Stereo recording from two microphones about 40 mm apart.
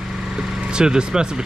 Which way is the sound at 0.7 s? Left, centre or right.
Centre.